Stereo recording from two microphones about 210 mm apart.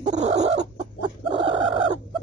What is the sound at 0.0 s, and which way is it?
Chicken, 35° right (ahead or behind).